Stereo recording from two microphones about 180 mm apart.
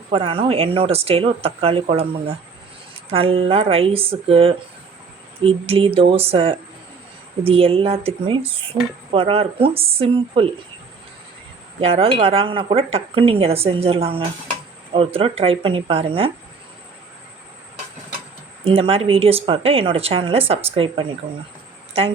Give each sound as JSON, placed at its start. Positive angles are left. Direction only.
{"t": 0.1, "sound": "speech", "side_deg": -30}
{"t": 11.8, "sound": "speech", "side_deg": -30}
{"t": 18.6, "sound": "speech", "side_deg": -30}